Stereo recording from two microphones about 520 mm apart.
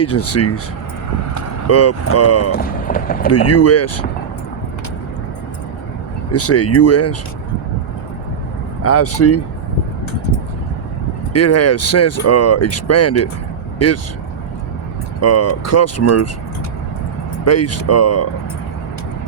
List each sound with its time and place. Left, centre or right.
0.0 s speech: left
3.3 s speech: left
6.3 s speech: left
8.8 s speech: left
11.3 s speech: left
15.2 s speech: left
17.4 s speech: left